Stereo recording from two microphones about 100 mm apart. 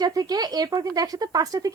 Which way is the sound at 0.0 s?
40° right (ahead or behind).